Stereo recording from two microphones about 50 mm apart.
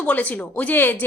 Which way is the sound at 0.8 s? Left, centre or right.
Left.